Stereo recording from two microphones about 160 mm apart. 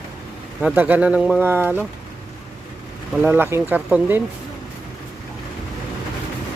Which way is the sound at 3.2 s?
15° right (ahead or behind).